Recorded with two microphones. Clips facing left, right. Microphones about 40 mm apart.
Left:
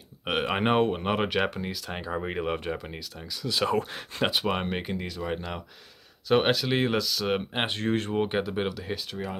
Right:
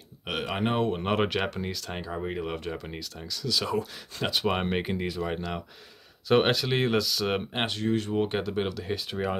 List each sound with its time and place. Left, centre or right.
0.3 s speech: left
0.9 s speech: centre
2.0 s speech: left
3.4 s speech: left
4.5 s speech: centre
7.8 s speech: left
8.1 s speech: centre